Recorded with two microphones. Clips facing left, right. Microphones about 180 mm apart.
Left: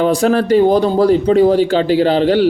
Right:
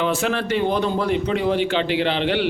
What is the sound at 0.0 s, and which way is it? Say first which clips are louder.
Speech: left 9 dB; 40° left (ahead or behind).